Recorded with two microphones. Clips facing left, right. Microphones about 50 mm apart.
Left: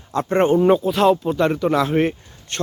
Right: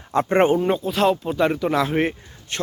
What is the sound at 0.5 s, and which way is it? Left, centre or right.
Speech, centre.